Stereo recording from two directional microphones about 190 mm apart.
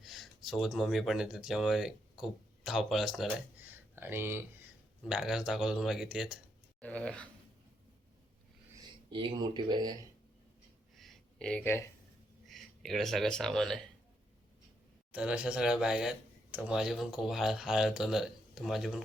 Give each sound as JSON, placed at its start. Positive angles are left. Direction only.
{"t": 0.0, "sound": "speech", "side_deg": 0}
{"t": 6.8, "sound": "dog", "side_deg": 5}
{"t": 9.0, "sound": "speech", "side_deg": -25}
{"t": 10.9, "sound": "a sound", "side_deg": 0}
{"t": 12.5, "sound": "speech", "side_deg": 0}
{"t": 15.1, "sound": "speech", "side_deg": -5}